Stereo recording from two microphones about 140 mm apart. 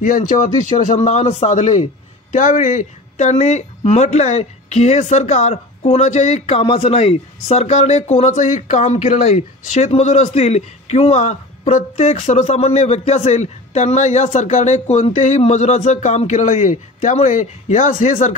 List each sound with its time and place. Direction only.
0.0 s a man's voice: 70° left (ahead or behind)